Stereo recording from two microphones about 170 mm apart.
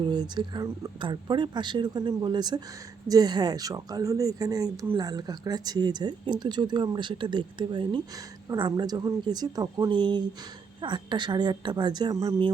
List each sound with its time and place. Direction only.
0.0 s speech: 25° right (ahead or behind)